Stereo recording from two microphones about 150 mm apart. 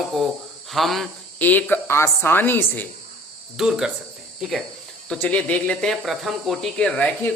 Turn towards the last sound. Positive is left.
turn(degrees=5)  # may be behind; listen again after turning